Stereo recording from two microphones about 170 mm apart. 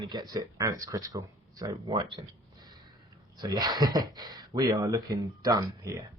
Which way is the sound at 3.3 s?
20° right (ahead or behind).